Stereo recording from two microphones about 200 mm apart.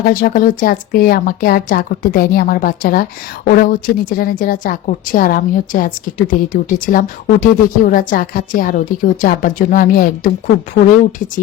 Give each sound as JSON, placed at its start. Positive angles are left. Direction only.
{"t": 0.0, "sound": "speech", "side_deg": 45}